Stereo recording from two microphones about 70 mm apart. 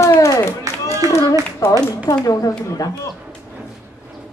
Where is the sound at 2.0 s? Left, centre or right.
Left.